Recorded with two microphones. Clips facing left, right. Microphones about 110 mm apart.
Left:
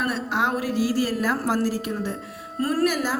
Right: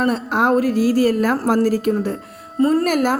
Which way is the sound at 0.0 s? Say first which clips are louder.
Right 7 dB; 50° right (ahead or behind).